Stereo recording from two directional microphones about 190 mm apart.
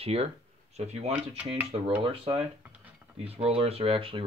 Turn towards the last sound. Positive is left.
turn(degrees=-30)  # may be behind; listen again after turning